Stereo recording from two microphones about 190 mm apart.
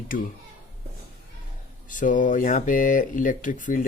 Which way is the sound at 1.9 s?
45° left (ahead or behind).